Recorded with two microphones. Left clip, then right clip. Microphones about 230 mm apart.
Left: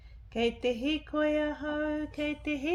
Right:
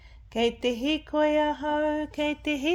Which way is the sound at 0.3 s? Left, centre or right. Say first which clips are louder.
Right 4 dB; right.